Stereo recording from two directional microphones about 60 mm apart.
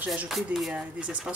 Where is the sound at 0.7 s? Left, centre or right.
Centre.